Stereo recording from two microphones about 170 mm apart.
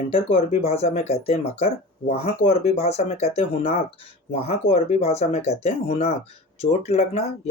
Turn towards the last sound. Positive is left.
turn(degrees=40)  # may be behind; listen again after turning